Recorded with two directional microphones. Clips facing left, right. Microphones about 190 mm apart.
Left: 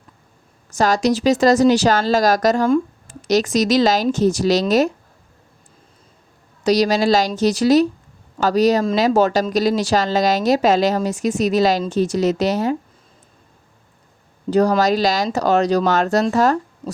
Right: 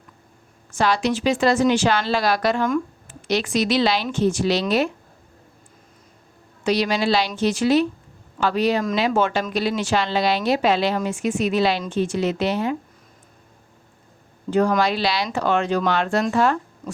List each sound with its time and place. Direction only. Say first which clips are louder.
0.7 s speech: left 4 dB; 40° left (ahead or behind)
6.7 s speech: left 5 dB; 40° left (ahead or behind)
14.5 s speech: left 4 dB; 35° left (ahead or behind)